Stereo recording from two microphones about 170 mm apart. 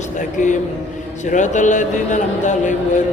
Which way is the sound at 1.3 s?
45° left (ahead or behind).